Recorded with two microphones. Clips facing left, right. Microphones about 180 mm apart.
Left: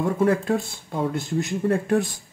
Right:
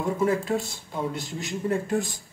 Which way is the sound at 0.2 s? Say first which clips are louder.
Left 3 dB; 55° left (ahead or behind).